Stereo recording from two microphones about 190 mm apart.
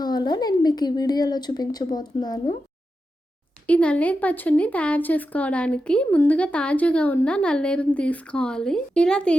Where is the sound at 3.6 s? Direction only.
5° left (ahead or behind).